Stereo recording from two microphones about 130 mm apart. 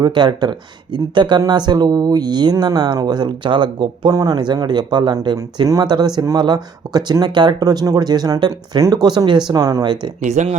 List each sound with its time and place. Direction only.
0.0 s speech: 35° right (ahead or behind)
10.2 s speech: 65° right (ahead or behind)